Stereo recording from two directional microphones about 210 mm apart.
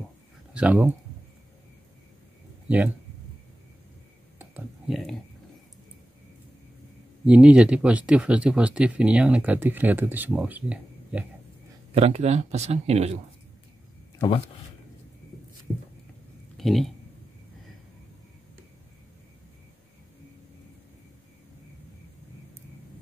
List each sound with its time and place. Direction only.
0.5 s speech: 5° right (ahead or behind)
4.4 s a sound: 5° right (ahead or behind)
7.2 s speech: 5° right (ahead or behind)
11.9 s speech: 30° right (ahead or behind)
16.5 s speech: centre (ahead or behind)